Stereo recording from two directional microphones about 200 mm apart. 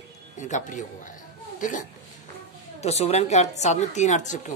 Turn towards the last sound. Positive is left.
turn(degrees=35)  # may be behind; listen again after turning